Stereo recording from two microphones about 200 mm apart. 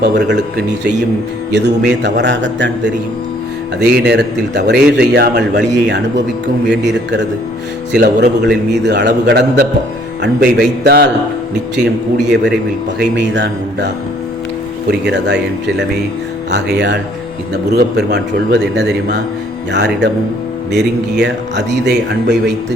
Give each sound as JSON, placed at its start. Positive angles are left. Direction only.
{"t": 0.0, "sound": "a man's voice", "side_deg": -55}
{"t": 12.2, "sound": "a man's voice", "side_deg": -60}
{"t": 16.5, "sound": "a man's voice", "side_deg": -60}
{"t": 21.2, "sound": "a man's voice", "side_deg": -60}